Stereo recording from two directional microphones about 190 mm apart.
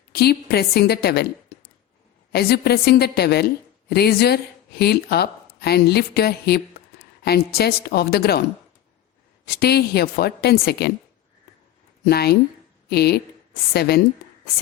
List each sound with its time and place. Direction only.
0.1 s a woman's voice: 55° left (ahead or behind)
2.3 s a woman's voice: 55° left (ahead or behind)
9.5 s a woman's voice: 55° left (ahead or behind)
12.0 s a woman's voice: 55° left (ahead or behind)